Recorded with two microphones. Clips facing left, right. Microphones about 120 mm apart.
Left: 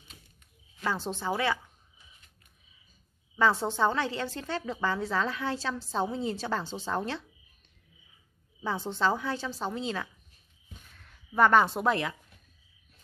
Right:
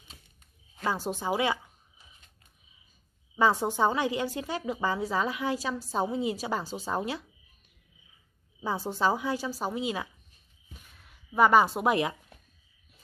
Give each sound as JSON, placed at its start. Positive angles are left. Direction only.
{"t": 0.8, "sound": "a woman's voice", "side_deg": -10}
{"t": 3.3, "sound": "a woman's voice", "side_deg": -15}
{"t": 8.6, "sound": "a woman's voice", "side_deg": -10}
{"t": 10.7, "sound": "a sound", "side_deg": -5}
{"t": 11.9, "sound": "speech", "side_deg": -20}